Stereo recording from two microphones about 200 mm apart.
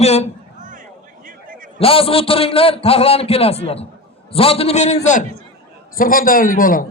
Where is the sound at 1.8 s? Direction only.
30° left (ahead or behind); by 6.8 s 45° left (ahead or behind).